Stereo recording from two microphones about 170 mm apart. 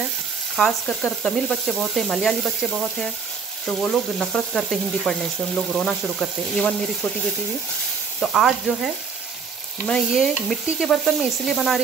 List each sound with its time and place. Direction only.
0.6 s sizzle: 5° left (ahead or behind)
8.2 s sizzle: centre (ahead or behind)